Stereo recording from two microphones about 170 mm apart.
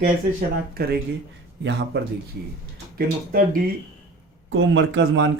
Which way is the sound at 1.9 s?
75° right (ahead or behind).